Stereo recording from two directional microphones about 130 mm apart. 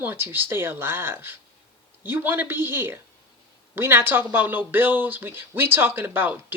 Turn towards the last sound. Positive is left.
turn(degrees=-15)  # may be behind; listen again after turning